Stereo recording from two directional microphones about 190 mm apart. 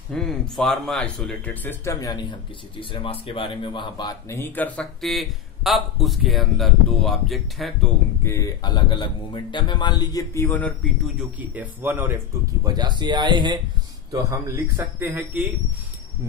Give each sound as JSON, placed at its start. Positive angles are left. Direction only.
{"t": 0.1, "sound": "speech", "side_deg": 5}
{"t": 4.3, "sound": "a man's voice", "side_deg": 10}
{"t": 8.2, "sound": "speech", "side_deg": 15}
{"t": 11.1, "sound": "speech", "side_deg": -10}
{"t": 12.6, "sound": "speech", "side_deg": -20}